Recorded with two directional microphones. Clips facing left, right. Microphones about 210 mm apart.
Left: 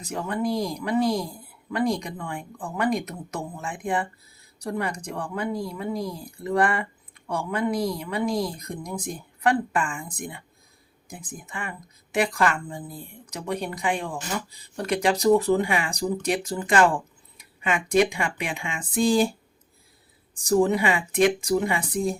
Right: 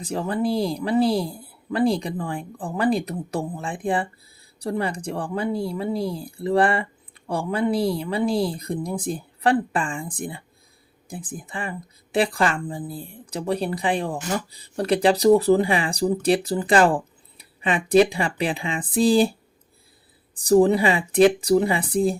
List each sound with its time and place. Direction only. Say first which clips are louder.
0.0 s speech: right 3 dB; 30° right (ahead or behind)
20.3 s speech: right 5 dB; 35° right (ahead or behind)